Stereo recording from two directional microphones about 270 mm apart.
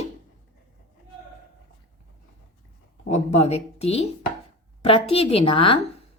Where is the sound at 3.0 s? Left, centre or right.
Left.